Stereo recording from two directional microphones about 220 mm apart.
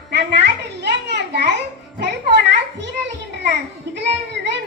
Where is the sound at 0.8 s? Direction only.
50° right (ahead or behind).